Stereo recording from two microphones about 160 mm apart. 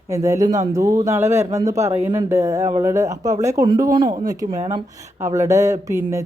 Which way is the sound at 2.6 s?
35° right (ahead or behind).